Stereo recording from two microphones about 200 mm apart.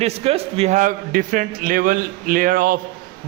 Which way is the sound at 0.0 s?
30° right (ahead or behind).